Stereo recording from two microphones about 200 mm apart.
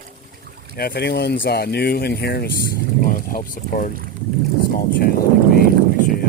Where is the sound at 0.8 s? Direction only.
50° left (ahead or behind).